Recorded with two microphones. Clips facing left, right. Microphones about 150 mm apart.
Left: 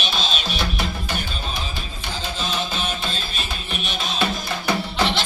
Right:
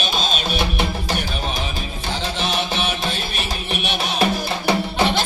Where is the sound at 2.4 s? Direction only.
75° right (ahead or behind).